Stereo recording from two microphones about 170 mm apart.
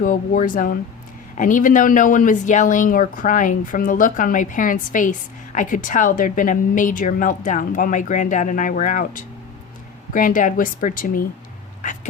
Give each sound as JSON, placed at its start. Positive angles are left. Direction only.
{"t": 0.0, "sound": "a woman's voice", "side_deg": 55}